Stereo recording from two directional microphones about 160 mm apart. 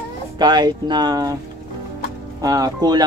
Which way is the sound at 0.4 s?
25° right (ahead or behind).